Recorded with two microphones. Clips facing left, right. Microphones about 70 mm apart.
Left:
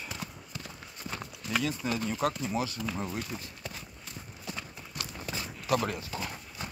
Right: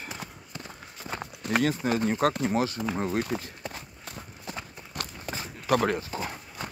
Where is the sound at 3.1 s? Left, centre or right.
Right.